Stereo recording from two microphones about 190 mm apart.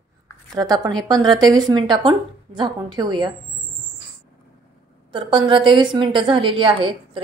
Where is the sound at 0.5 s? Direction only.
20° right (ahead or behind).